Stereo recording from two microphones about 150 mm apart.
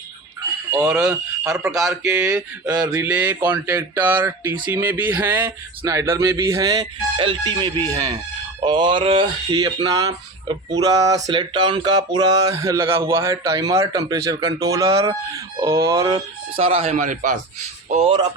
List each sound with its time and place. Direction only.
0.7 s speech: 20° right (ahead or behind)
1.6 s a sound: 20° right (ahead or behind)
2.2 s speech: 10° right (ahead or behind)
2.7 s speech: 20° right (ahead or behind)
5.8 s a sound: 20° right (ahead or behind)
16.6 s speech: 40° right (ahead or behind)
17.8 s speech: 45° right (ahead or behind)